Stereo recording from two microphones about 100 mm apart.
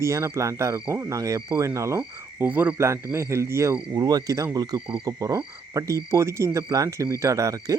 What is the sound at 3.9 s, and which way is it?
Speech, 40° right (ahead or behind).